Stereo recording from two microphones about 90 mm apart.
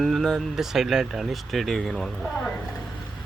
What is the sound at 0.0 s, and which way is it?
Speech, centre (ahead or behind).